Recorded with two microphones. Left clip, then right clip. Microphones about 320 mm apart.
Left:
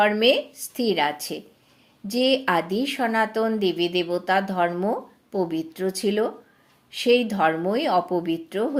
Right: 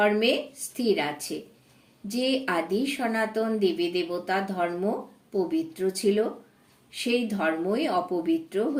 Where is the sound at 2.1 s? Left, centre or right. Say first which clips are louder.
Left 6 dB; left.